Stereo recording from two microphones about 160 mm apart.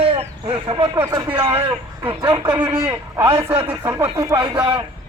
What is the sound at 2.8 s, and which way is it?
Speech, 15° right (ahead or behind).